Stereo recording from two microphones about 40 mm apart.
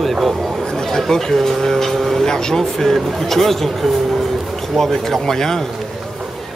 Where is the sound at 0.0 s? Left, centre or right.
Centre.